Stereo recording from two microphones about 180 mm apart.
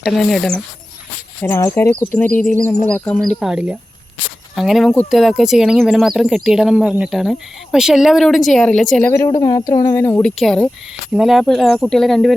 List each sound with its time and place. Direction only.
0.0 s speech: centre (ahead or behind)
1.4 s speech: 15° left (ahead or behind)
9.0 s a woman's voice: 15° left (ahead or behind)
10.3 s speech: centre (ahead or behind)